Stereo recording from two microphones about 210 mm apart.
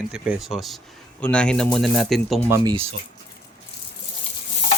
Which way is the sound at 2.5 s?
20° right (ahead or behind).